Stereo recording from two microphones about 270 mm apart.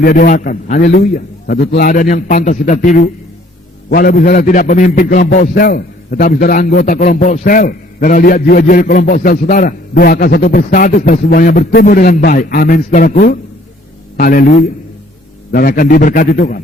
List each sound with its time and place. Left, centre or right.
0.0 s a man's voice: left
15.5 s a man's voice: left